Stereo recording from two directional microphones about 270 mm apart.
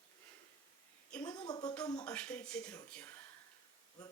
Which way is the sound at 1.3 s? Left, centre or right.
Centre.